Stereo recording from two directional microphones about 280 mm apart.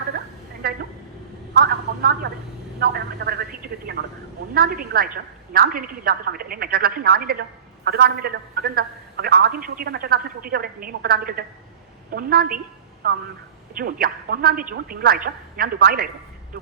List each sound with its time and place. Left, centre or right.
1.5 s a man's voice: right
3.2 s a man's voice: right